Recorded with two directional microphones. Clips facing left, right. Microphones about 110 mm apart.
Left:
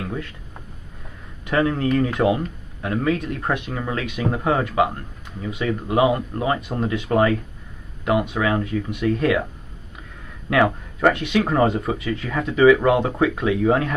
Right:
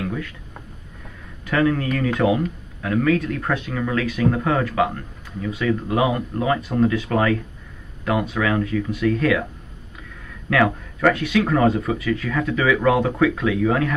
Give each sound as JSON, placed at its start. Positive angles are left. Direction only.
{"t": 1.4, "sound": "speech", "side_deg": 25}
{"t": 10.5, "sound": "speech", "side_deg": 25}